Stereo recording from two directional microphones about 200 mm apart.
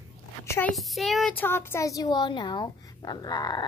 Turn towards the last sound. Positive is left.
turn(degrees=20)  # may be behind; listen again after turning